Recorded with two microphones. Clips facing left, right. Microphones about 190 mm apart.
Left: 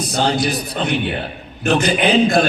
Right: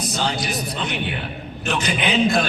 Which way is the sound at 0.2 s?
35° left (ahead or behind).